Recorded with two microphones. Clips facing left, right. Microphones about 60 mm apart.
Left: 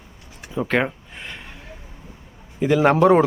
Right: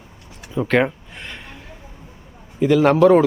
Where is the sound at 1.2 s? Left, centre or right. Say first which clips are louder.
Even; centre.